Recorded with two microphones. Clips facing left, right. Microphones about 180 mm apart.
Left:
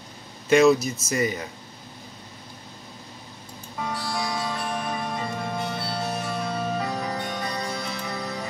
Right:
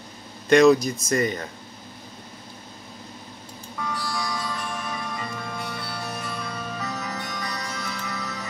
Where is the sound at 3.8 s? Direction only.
25° left (ahead or behind).